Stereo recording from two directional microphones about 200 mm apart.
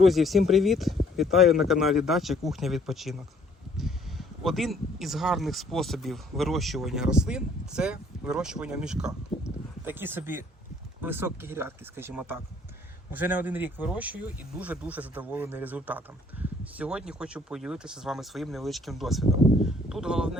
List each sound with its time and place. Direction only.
0.0 s speech: centre (ahead or behind)
16.4 s a sound: 5° right (ahead or behind)
16.7 s speech: 5° right (ahead or behind)